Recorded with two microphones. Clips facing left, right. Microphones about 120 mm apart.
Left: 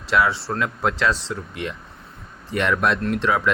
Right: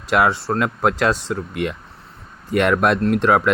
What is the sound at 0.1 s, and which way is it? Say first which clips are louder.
Speech: right 3 dB; 50° right (ahead or behind).